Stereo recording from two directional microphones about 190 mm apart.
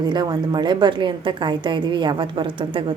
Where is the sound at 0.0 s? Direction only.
20° right (ahead or behind).